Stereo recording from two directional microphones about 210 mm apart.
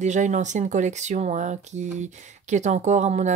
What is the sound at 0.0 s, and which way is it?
Speech, 35° right (ahead or behind).